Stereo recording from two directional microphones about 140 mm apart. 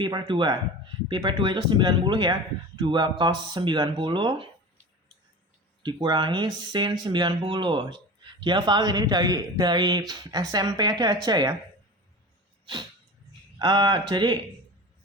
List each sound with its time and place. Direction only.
0.0 s speech: 35° right (ahead or behind)
5.8 s speech: 35° right (ahead or behind)
13.6 s speech: 30° right (ahead or behind)